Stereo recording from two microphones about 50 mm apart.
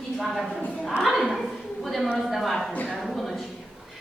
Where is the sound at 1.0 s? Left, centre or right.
Centre.